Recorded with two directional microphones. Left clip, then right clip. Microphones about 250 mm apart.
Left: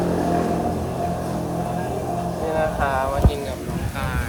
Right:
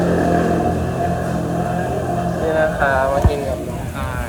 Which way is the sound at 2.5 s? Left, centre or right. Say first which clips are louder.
Right 5 dB; left.